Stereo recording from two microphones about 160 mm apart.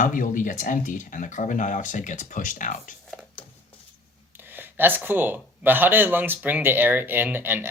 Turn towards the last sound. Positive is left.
turn(degrees=-10)  # may be behind; listen again after turning